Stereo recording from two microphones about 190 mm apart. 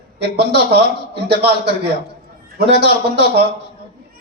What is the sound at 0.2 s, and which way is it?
A man's voice, 60° right (ahead or behind).